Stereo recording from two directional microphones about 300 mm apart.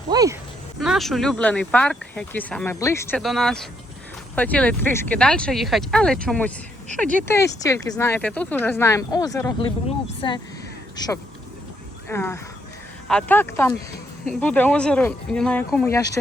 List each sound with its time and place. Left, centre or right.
0.1 s speech: centre
0.8 s speech: centre